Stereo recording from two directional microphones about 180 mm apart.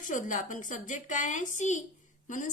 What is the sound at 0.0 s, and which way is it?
A woman's voice, 45° left (ahead or behind).